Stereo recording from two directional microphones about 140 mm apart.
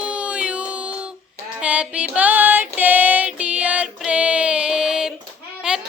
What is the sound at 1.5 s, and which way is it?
Female singing, 10° right (ahead or behind).